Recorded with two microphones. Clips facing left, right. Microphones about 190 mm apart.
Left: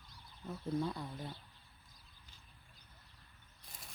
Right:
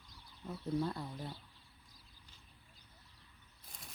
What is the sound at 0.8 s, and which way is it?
Speech, centre (ahead or behind).